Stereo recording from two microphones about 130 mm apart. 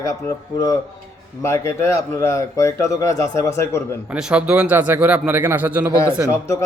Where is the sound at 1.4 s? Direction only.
20° left (ahead or behind).